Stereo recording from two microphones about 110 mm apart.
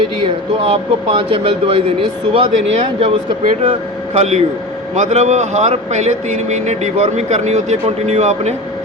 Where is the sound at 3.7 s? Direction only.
80° right.